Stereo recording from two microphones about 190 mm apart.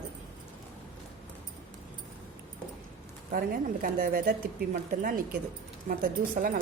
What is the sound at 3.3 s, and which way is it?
A woman's voice, 50° right (ahead or behind).